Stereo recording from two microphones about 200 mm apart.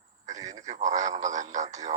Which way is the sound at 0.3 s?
40° right (ahead or behind).